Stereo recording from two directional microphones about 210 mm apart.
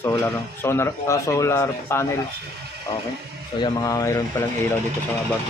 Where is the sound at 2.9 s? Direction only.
25° left (ahead or behind).